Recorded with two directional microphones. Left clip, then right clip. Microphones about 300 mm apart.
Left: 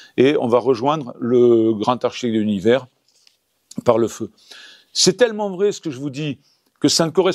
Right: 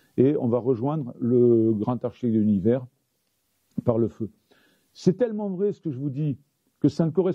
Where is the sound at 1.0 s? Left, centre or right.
Centre.